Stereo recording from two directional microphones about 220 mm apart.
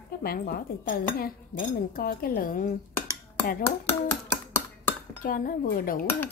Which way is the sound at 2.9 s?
15° left (ahead or behind).